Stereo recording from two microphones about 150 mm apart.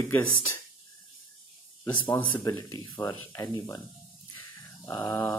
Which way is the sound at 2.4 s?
20° left (ahead or behind).